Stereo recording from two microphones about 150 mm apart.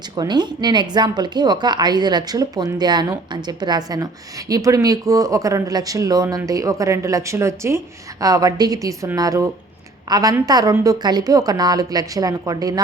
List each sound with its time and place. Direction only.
0.2 s a woman's voice: 30° right (ahead or behind)